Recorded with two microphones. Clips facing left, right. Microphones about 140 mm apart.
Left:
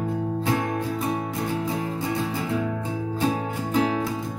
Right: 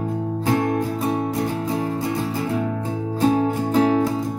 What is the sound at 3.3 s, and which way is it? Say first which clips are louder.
Music: right 7 dB; 35° right (ahead or behind).